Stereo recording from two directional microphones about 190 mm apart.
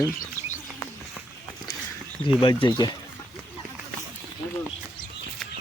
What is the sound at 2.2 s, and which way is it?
Speech, 25° left (ahead or behind).